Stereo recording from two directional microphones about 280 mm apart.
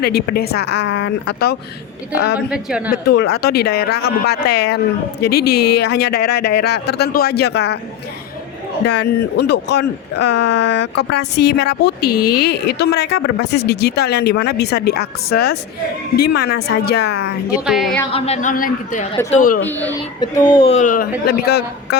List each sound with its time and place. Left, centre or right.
0.0 s speech: left
2.5 s a woman's voice: centre
2.9 s speech: left
5.4 s a woman's voice: left
5.8 s speech: left
8.8 s speech: left
12.1 s a woman's voice: left
12.4 s speech: left
18.1 s speech: left
19.6 s speech: centre
20.5 s speech: centre